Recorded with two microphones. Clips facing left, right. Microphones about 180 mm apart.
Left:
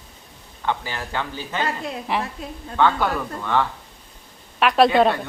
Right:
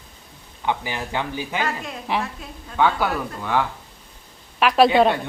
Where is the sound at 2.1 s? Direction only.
Centre (ahead or behind).